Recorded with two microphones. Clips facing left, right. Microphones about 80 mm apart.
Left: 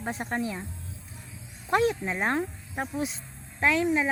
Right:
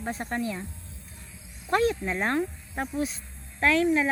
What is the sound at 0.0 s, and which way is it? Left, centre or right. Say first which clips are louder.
Speech: even; centre.